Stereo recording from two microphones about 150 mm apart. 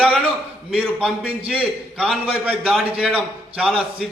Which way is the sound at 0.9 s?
5° right (ahead or behind).